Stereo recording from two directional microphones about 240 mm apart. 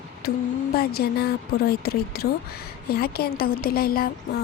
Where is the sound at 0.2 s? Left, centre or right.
Left.